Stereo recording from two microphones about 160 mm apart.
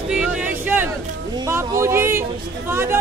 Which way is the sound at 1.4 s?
20° right (ahead or behind).